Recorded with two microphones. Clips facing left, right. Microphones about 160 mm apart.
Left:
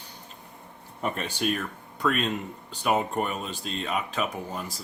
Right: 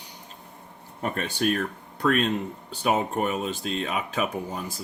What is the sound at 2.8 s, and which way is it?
Speech, 50° right (ahead or behind).